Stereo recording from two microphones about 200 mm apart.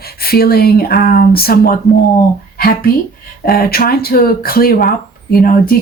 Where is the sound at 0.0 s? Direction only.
50° left (ahead or behind).